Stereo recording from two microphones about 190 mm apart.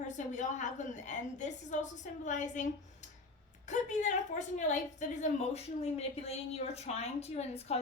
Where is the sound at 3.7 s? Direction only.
40° left (ahead or behind).